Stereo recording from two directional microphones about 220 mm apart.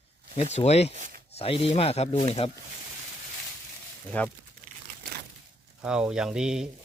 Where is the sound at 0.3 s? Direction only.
30° left (ahead or behind).